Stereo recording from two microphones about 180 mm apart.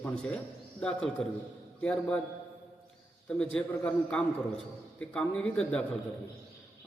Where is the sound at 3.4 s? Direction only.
5° left (ahead or behind).